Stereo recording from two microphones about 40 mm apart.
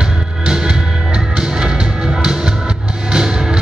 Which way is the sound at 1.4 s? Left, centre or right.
Centre.